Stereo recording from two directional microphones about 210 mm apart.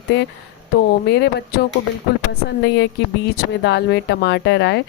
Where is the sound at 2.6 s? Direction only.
55° left (ahead or behind).